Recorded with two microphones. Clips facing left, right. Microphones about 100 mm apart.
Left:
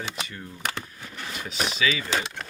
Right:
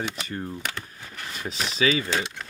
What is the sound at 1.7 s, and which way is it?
Speech, 35° right (ahead or behind).